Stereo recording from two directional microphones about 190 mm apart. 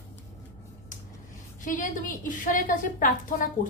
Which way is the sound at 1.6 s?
45° left (ahead or behind).